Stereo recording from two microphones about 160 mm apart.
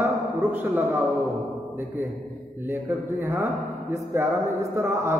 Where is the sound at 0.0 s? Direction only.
10° right (ahead or behind).